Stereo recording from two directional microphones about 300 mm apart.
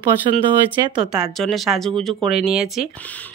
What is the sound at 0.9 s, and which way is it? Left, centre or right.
Speech, centre.